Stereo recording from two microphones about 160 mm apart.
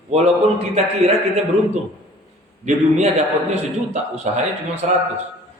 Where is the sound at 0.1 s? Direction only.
40° right (ahead or behind).